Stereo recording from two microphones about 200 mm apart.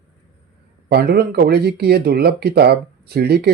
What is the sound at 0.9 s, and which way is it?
Speech, 55° right (ahead or behind).